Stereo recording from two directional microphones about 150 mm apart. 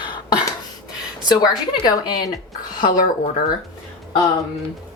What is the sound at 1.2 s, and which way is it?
A woman's voice, 25° left (ahead or behind).